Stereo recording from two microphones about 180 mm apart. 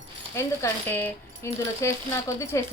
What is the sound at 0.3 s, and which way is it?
Speech, 15° left (ahead or behind).